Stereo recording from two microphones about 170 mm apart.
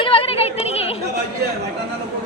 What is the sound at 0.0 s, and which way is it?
Chatter, 30° left (ahead or behind).